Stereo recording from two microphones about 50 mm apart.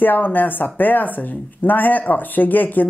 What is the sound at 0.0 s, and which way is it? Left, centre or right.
A woman's voice, left.